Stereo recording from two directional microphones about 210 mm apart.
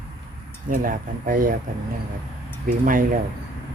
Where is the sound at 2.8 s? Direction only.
40° right (ahead or behind).